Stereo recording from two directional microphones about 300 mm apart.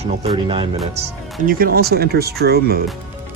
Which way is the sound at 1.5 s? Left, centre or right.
Right.